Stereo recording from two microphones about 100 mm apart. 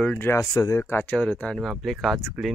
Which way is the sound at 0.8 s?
20° left (ahead or behind).